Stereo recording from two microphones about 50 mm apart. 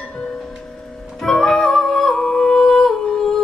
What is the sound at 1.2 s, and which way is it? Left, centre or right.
Music, centre.